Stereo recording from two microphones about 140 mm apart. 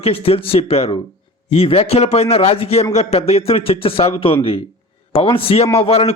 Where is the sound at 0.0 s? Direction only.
45° left (ahead or behind).